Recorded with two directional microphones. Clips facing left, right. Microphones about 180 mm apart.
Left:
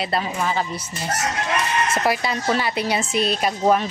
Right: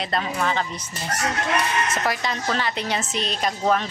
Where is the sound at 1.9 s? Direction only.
10° left (ahead or behind).